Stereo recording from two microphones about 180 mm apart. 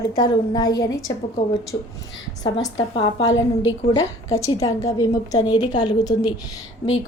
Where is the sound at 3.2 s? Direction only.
90° left.